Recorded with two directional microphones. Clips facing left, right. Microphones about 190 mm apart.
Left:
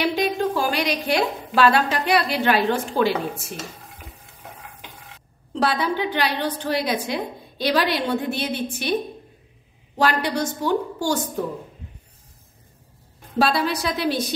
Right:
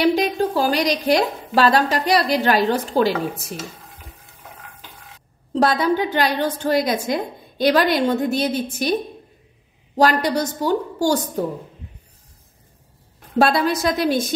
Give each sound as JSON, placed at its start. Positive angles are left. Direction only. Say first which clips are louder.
{"t": 0.0, "sound": "a woman's voice", "louder": "right 4 dB", "side_deg": -40}
{"t": 5.5, "sound": "a woman's voice", "louder": "right 5 dB", "side_deg": -45}
{"t": 13.4, "sound": "a woman's voice", "louder": "right 4 dB", "side_deg": -50}